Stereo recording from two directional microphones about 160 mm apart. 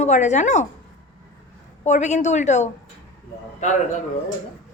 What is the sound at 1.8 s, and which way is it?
Speech, 45° left (ahead or behind).